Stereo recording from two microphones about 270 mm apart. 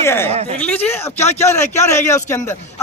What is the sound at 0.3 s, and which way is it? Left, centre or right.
Speech, right.